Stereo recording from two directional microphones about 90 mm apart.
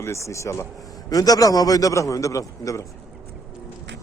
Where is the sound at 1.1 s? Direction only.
45° left (ahead or behind).